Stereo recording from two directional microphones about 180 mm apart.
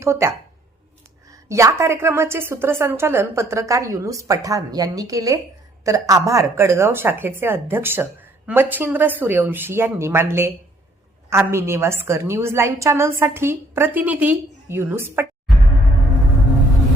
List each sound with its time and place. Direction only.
0.0 s a woman's voice: 15° right (ahead or behind)